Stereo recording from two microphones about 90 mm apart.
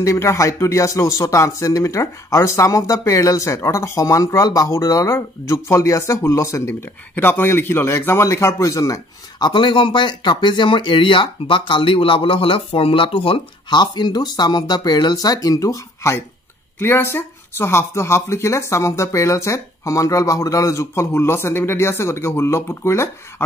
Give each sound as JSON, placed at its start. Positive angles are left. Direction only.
{"t": 0.0, "sound": "speech", "side_deg": 35}
{"t": 6.7, "sound": "speech", "side_deg": 25}
{"t": 9.4, "sound": "speech", "side_deg": 60}